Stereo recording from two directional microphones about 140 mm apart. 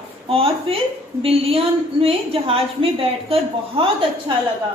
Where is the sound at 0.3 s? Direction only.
45° right (ahead or behind).